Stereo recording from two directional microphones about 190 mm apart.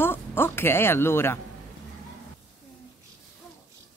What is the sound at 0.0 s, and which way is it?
Speech, 10° left (ahead or behind).